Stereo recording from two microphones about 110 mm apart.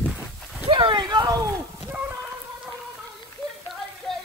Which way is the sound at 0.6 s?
50° right (ahead or behind).